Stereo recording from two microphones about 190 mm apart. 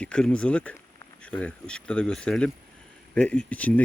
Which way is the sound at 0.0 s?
5° left (ahead or behind).